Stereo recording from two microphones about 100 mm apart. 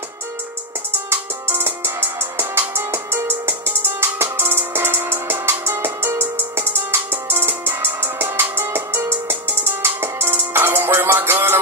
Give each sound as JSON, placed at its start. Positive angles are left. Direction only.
{"t": 0.9, "sound": "music", "side_deg": -25}